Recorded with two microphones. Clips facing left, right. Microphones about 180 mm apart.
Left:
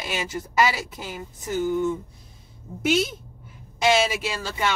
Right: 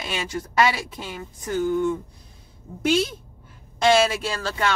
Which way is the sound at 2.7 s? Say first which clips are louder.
Right 1 dB; 10° left (ahead or behind).